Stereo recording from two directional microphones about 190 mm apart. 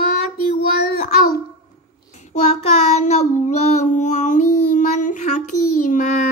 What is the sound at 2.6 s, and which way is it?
Child singing, 35° left (ahead or behind).